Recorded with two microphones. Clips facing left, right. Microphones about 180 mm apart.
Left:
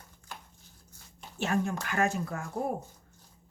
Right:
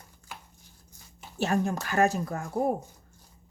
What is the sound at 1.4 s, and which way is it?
Speech, 35° right (ahead or behind).